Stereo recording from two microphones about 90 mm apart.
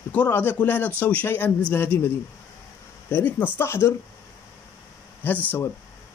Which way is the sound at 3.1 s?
20° left (ahead or behind).